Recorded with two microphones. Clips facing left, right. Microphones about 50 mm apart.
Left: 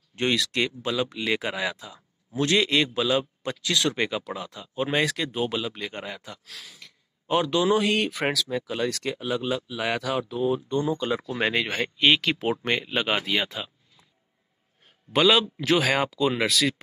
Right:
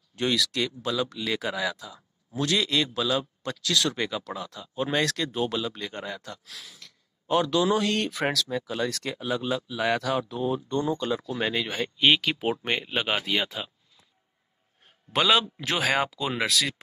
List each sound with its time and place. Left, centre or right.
0.1 s a man's voice: left; by 6.8 s centre
6.8 s speech: centre
11.1 s a man's voice: centre
11.7 s speech: centre
15.1 s speech: centre